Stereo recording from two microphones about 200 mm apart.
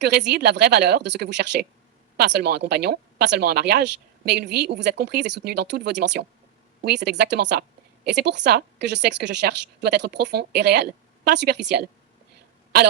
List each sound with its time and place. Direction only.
0.0 s a woman's voice: 55° right (ahead or behind)